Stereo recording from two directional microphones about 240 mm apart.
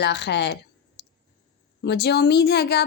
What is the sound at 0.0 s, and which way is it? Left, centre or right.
A woman's voice, left.